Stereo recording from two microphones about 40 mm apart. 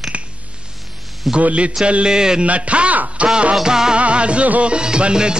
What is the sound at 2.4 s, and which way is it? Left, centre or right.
Speech, right.